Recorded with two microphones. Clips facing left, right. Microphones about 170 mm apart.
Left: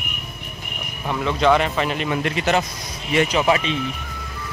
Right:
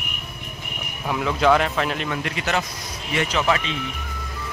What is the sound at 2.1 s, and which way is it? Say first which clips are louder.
A man's voice: left 5 dB; 20° left (ahead or behind).